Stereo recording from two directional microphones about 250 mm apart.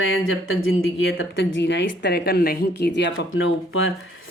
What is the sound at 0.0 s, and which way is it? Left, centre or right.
Speech, left.